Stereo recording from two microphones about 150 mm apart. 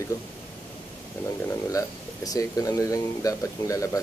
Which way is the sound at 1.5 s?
20° left (ahead or behind).